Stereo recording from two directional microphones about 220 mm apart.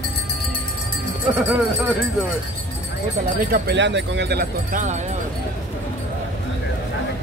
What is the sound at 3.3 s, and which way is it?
Speech, 45° right (ahead or behind).